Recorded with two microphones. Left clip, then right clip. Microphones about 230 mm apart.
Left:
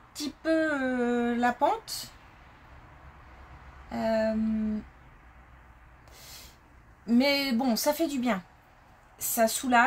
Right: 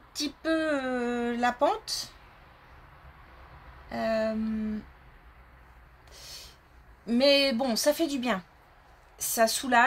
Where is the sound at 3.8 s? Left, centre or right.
Right.